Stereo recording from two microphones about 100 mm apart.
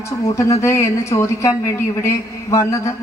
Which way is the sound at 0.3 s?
30° left (ahead or behind).